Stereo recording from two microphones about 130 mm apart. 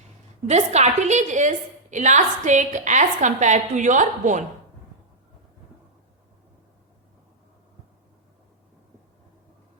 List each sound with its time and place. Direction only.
0.4 s a woman's voice: 60° right (ahead or behind)